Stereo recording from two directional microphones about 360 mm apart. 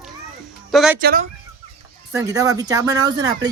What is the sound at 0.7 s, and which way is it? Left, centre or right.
Speech, centre.